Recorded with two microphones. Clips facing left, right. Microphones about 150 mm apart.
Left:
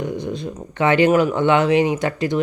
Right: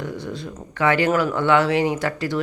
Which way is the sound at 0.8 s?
20° left (ahead or behind).